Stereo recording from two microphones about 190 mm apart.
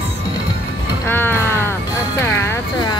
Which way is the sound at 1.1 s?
10° left (ahead or behind).